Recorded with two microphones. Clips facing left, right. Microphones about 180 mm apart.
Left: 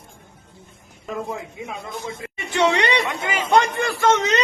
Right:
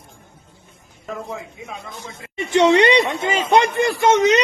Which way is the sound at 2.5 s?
20° right (ahead or behind).